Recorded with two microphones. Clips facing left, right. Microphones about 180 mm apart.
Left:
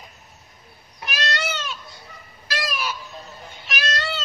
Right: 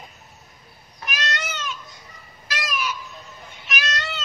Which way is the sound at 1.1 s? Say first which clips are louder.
Left 3 dB; 35° left (ahead or behind).